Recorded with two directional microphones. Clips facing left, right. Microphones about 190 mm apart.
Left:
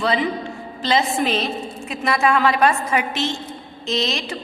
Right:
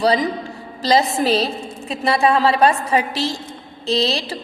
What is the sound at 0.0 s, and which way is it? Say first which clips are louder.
A woman's voice: right 3 dB; 40° right (ahead or behind).